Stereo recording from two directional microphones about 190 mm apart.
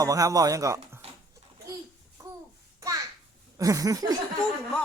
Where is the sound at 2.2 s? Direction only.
15° right (ahead or behind).